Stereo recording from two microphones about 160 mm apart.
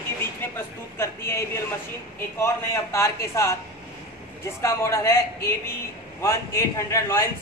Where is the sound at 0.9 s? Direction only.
15° left (ahead or behind).